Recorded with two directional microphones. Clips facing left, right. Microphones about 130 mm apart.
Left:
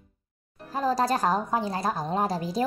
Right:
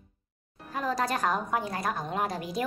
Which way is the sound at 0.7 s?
35° left (ahead or behind).